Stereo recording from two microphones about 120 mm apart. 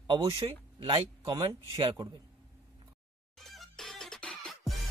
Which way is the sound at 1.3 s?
30° right (ahead or behind).